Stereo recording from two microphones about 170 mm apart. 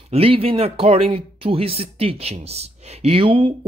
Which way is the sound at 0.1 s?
35° right (ahead or behind).